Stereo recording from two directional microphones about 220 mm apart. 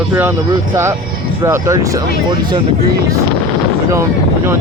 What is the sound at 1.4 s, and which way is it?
Speech, 10° right (ahead or behind).